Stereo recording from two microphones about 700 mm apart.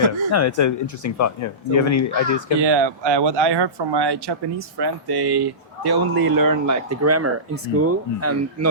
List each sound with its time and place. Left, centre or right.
0.3 s speech: left
2.6 s speech: right; by 8.4 s centre